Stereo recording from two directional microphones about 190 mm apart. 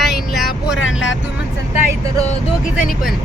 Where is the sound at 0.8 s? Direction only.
90° left.